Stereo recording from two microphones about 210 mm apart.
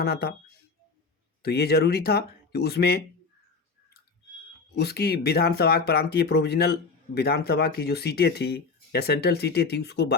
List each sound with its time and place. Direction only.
0.0 s speech: 50° left (ahead or behind)
1.4 s speech: 50° left (ahead or behind)
4.7 s speech: 50° left (ahead or behind)